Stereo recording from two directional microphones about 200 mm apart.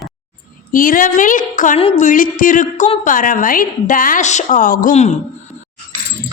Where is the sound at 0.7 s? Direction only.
45° left (ahead or behind).